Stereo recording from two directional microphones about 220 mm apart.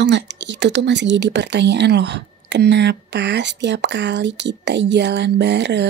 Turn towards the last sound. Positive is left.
turn(degrees=-50)  # may be behind; listen again after turning